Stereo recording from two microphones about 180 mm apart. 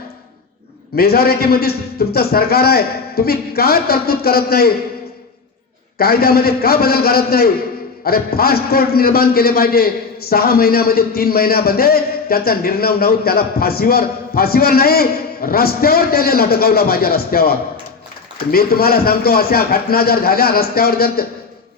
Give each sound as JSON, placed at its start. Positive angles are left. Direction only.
{"t": 0.9, "sound": "a man's voice", "side_deg": 60}
{"t": 6.0, "sound": "a man's voice", "side_deg": 60}